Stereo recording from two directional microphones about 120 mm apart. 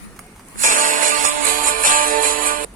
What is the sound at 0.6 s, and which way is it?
Music, 90° right.